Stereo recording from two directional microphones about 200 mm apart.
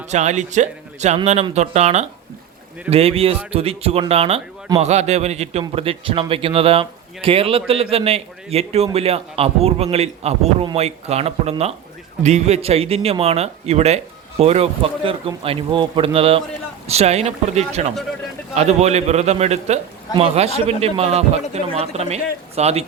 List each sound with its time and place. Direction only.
0.1 s a man's voice: 35° right (ahead or behind)